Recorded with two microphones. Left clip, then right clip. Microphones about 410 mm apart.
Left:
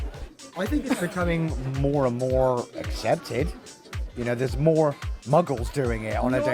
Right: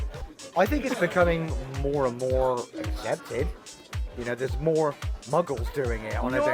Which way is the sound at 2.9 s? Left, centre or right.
Left.